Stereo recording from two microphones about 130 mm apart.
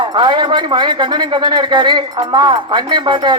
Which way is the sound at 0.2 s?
35° right (ahead or behind).